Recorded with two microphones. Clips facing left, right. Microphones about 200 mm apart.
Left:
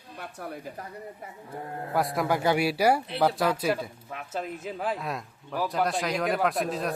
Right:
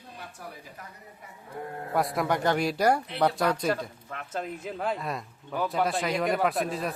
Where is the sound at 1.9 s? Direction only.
Centre (ahead or behind).